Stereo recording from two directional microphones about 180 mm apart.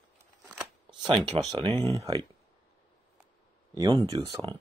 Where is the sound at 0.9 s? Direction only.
25° right (ahead or behind).